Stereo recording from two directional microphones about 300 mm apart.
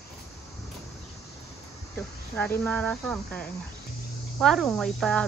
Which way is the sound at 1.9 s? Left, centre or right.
Centre.